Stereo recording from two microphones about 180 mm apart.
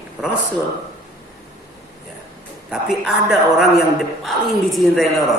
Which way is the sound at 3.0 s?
Centre (ahead or behind).